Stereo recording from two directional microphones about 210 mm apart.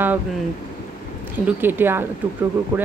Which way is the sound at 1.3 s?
10° right (ahead or behind).